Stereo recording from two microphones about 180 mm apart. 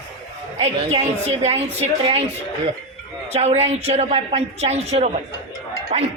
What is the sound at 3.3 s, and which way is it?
Speech, 35° right (ahead or behind).